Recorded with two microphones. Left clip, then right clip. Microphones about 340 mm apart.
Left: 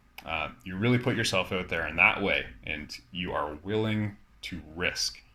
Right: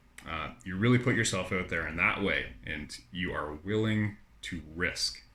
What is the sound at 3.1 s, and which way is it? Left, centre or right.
Speech, left.